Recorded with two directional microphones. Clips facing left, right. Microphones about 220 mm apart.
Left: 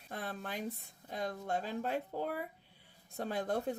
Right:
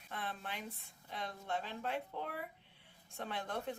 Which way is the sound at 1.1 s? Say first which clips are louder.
Left 5 dB; 40° left (ahead or behind).